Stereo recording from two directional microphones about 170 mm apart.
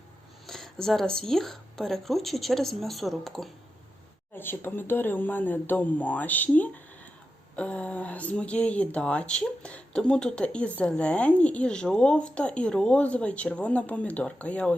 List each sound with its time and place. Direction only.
0.4 s speech: centre (ahead or behind)
4.4 s speech: 10° left (ahead or behind)